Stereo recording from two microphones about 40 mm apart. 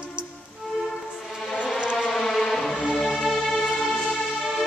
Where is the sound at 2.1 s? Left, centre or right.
Centre.